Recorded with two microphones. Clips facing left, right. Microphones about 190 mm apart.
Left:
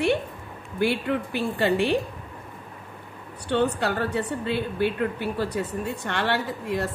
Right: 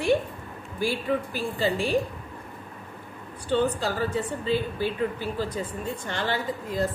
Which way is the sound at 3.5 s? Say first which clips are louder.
Left 1 dB; 65° left (ahead or behind).